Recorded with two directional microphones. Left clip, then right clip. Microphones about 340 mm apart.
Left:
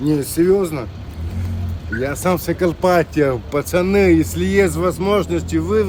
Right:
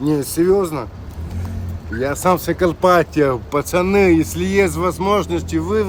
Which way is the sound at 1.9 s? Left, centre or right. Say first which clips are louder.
Right 3 dB; centre.